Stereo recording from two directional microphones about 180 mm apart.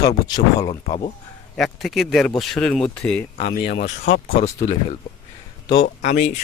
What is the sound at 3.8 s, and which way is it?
Speech, 40° left (ahead or behind).